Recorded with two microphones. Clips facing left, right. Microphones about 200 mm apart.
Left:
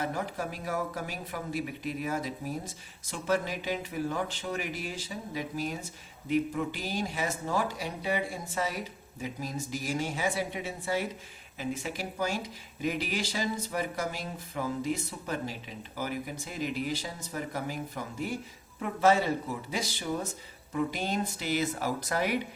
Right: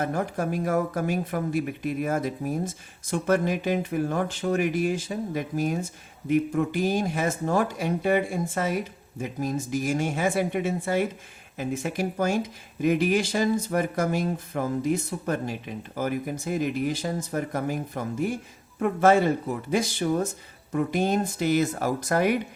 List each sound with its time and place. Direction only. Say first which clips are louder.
0.0 s speech: right 6 dB; 50° right (ahead or behind)